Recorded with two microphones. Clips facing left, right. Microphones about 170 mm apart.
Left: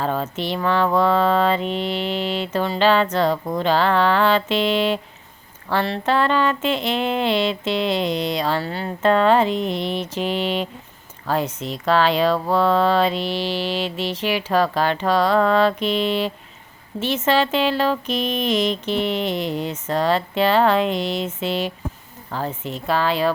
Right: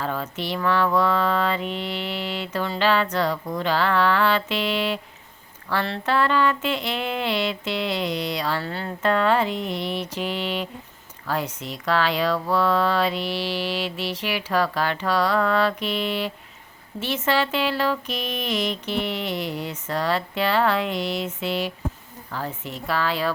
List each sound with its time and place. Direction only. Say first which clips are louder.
0.0 s speech: left 5 dB; 30° left (ahead or behind)
3.3 s a woman's voice: left 4 dB; 45° left (ahead or behind)
3.6 s speech: left 3 dB; 25° left (ahead or behind)